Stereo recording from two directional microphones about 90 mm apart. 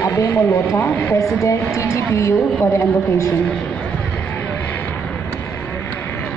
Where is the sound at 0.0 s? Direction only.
30° left (ahead or behind).